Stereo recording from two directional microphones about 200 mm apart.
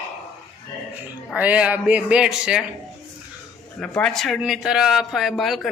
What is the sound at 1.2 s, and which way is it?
Speech, 5° right (ahead or behind).